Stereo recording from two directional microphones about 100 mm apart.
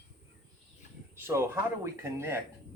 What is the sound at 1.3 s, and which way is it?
Speech, 25° right (ahead or behind).